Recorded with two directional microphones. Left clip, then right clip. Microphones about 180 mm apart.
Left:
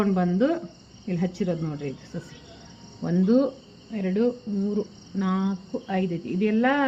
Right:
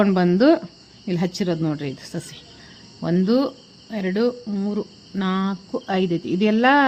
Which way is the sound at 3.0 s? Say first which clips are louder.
Right 2 dB; 85° right.